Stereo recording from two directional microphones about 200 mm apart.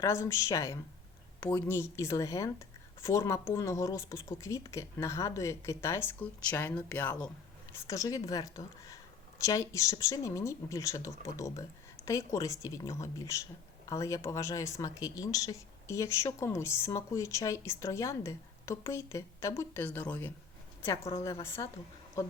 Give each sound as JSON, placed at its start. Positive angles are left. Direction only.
{"t": 0.0, "sound": "speech", "side_deg": 15}